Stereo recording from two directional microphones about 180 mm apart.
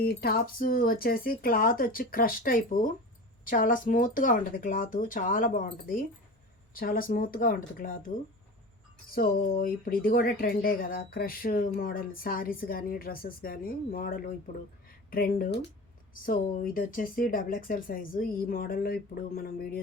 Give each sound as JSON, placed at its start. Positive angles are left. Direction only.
{"t": 0.0, "sound": "speech", "side_deg": 60}
{"t": 9.1, "sound": "speech", "side_deg": 55}